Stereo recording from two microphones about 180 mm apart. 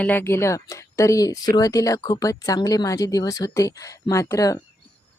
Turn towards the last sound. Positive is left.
turn(degrees=15)  # may be behind; listen again after turning